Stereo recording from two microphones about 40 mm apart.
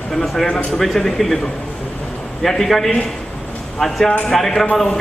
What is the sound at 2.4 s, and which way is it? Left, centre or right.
A man's voice, centre.